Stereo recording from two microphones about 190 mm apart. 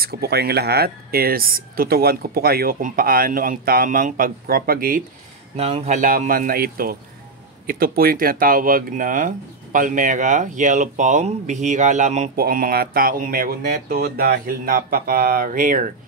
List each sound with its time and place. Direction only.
0.0 s speech: 55° right (ahead or behind)
5.6 s speech: 35° right (ahead or behind)